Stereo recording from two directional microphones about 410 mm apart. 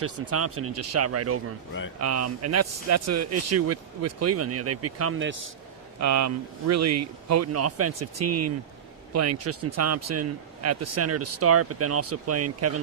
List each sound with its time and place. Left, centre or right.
0.0 s speech: right
6.0 s speech: right